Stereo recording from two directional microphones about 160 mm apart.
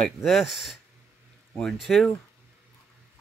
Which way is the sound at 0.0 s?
Centre (ahead or behind).